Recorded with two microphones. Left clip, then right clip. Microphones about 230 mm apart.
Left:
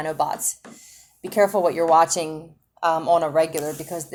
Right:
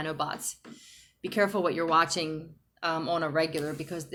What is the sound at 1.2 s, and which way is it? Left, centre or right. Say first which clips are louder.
Speech: left 8 dB; centre.